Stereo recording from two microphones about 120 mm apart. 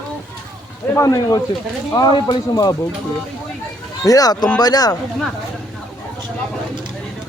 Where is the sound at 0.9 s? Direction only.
30° left (ahead or behind).